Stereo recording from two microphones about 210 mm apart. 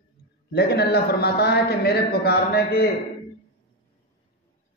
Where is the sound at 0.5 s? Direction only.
50° left (ahead or behind).